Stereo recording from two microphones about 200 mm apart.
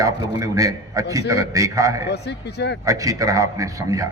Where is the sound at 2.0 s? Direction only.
55° left (ahead or behind).